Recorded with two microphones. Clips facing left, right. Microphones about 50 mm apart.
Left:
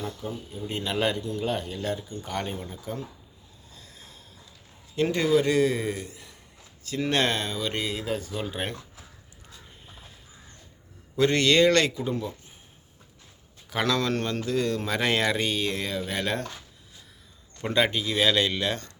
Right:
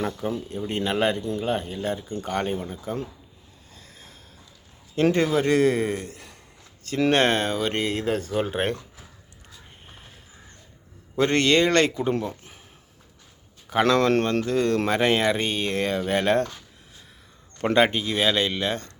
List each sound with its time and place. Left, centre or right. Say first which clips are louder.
0.0 s speech: right 7 dB; right
0.6 s speech: right 3 dB; right
5.1 s speech: left 2 dB; right
11.1 s speech: right 1 dB; right
12.3 s a sound: right 4 dB; right
13.8 s speech: right 6 dB; right
15.4 s speech: right 2 dB; right
17.7 s speech: right 3 dB; right